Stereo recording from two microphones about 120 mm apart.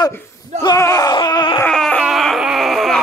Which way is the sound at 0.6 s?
30° left (ahead or behind).